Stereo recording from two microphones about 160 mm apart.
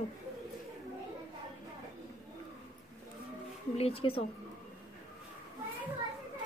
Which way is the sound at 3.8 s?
35° left (ahead or behind).